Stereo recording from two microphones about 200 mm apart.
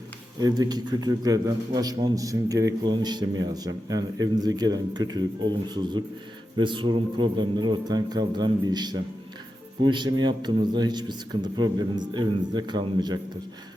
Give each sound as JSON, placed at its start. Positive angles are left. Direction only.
{"t": 0.3, "sound": "a man's voice", "side_deg": -20}